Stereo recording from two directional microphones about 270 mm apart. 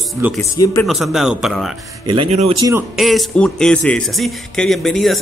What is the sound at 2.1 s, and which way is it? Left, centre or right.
Speech, right.